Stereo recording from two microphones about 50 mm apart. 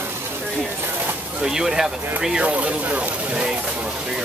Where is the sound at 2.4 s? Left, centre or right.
Right.